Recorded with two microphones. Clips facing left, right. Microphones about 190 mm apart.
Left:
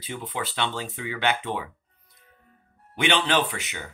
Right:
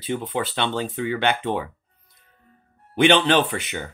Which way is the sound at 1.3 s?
55° right (ahead or behind).